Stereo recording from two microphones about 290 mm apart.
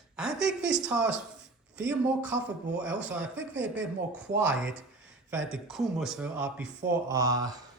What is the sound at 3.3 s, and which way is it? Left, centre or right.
Speech, right.